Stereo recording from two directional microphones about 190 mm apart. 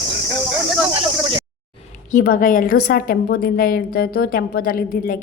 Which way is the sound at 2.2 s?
50° left (ahead or behind).